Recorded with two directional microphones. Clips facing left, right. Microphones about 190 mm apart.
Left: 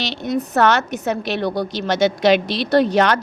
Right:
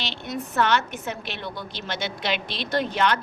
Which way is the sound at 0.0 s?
40° left (ahead or behind).